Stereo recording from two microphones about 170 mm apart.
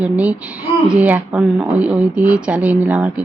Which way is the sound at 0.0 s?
5° right (ahead or behind).